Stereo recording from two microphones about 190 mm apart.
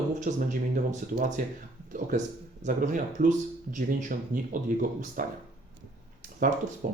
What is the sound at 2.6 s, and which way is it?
Speech, 40° right (ahead or behind).